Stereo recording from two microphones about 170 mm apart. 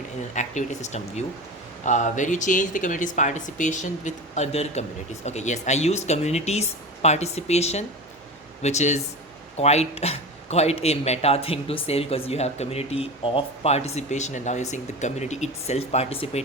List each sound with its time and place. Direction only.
0.3 s speech: 45° left (ahead or behind)